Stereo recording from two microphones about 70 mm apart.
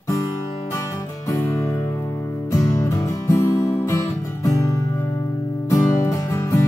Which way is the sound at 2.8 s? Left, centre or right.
Left.